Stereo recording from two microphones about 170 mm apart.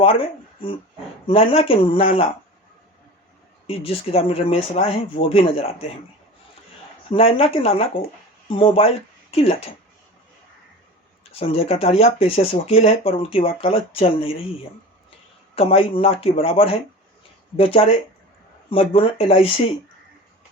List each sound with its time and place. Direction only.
0.0 s speech: 35° left (ahead or behind)
3.7 s speech: 35° left (ahead or behind)
7.1 s speech: 35° left (ahead or behind)
11.3 s speech: 35° left (ahead or behind)
15.5 s speech: 35° left (ahead or behind)